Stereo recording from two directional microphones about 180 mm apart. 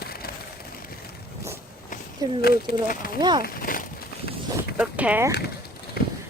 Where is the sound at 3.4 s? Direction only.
50° left (ahead or behind).